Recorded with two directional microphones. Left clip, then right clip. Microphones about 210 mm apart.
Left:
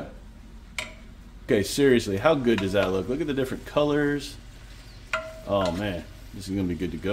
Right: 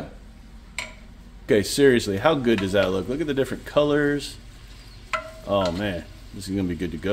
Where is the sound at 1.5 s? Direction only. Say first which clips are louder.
Right 3 dB; 15° right (ahead or behind).